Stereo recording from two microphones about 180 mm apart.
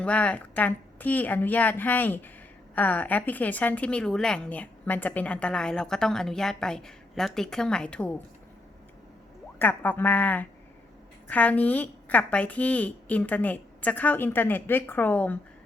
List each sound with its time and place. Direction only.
0.0 s a woman's voice: 10° left (ahead or behind)
9.6 s a woman's voice: 10° left (ahead or behind)